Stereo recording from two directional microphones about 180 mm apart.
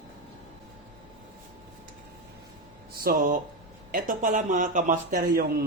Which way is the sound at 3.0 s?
50° right (ahead or behind).